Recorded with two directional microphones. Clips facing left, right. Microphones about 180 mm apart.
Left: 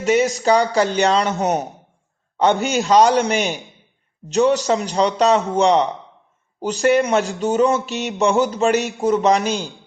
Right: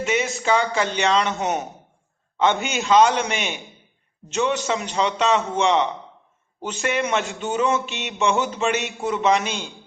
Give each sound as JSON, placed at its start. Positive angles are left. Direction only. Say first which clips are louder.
{"t": 0.0, "sound": "speech", "louder": "left 6 dB", "side_deg": 35}
{"t": 3.5, "sound": "a man's voice", "louder": "left 5 dB", "side_deg": 0}
{"t": 4.3, "sound": "speech", "louder": "left 6 dB", "side_deg": 35}